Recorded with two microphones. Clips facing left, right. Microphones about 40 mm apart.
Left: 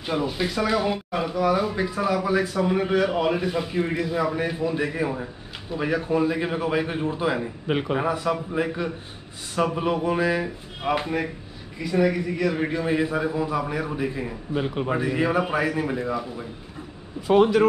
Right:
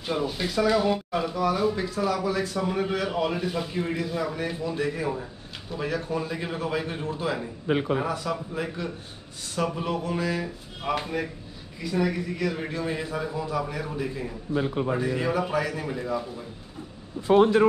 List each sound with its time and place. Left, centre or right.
0.0 s speech: centre
17.3 s speech: left